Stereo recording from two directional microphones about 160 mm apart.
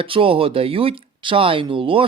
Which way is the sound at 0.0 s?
35° right (ahead or behind).